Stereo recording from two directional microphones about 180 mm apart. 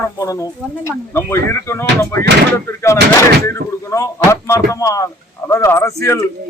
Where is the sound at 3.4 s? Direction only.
15° left (ahead or behind).